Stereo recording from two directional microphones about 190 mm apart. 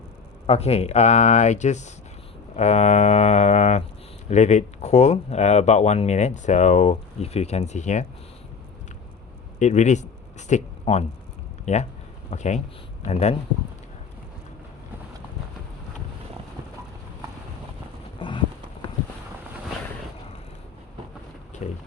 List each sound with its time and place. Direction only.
0.4 s speech: 35° left (ahead or behind)
9.6 s speech: 40° left (ahead or behind)
21.5 s a sound: 40° left (ahead or behind)